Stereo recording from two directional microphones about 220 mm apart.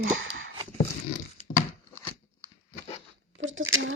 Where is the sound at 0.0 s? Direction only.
60° right (ahead or behind).